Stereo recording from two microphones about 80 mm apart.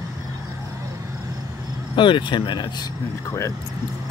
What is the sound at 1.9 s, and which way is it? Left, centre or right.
Speech, left.